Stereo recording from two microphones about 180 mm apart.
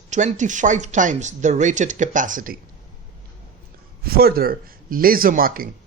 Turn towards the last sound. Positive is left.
turn(degrees=-55)  # may be behind; listen again after turning